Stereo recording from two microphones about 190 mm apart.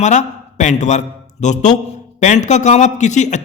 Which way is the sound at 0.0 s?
40° left (ahead or behind).